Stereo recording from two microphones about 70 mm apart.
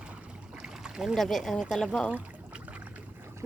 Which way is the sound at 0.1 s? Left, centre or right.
Centre.